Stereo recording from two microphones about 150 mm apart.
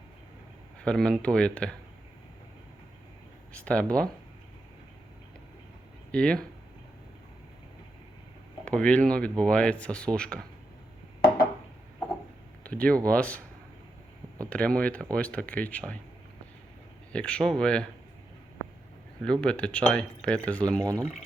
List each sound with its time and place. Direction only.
0.9 s speech: 5° left (ahead or behind)
3.5 s speech: 5° left (ahead or behind)
6.1 s speech: 5° left (ahead or behind)
8.6 s speech: 10° left (ahead or behind)
12.6 s speech: 10° left (ahead or behind)
14.5 s speech: 10° left (ahead or behind)
17.1 s speech: 5° left (ahead or behind)
19.2 s speech: 5° left (ahead or behind)
20.7 s speech: 25° right (ahead or behind)